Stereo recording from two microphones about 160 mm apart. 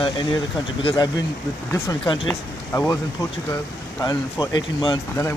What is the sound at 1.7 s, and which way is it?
Speech, 20° left (ahead or behind).